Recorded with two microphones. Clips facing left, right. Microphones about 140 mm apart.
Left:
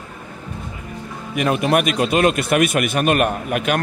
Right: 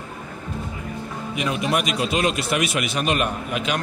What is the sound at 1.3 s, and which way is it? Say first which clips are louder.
A man's voice: left 6 dB; 55° left (ahead or behind).